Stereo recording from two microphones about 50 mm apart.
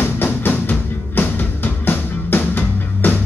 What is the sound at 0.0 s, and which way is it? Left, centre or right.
Music, left.